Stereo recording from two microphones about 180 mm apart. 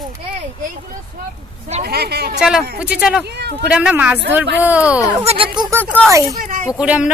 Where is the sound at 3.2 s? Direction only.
65° right (ahead or behind).